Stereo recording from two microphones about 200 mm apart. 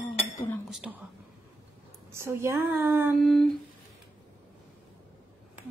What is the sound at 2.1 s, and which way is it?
A woman's voice, 15° right (ahead or behind).